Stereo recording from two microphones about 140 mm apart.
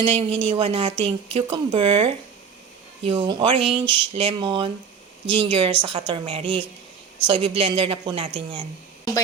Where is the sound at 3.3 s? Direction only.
40° right (ahead or behind).